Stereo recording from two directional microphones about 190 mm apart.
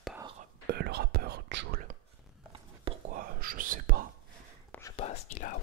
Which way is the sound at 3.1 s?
50° right (ahead or behind).